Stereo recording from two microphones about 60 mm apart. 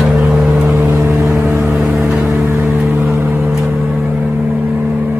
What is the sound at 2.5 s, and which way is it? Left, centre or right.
Vehicle, right.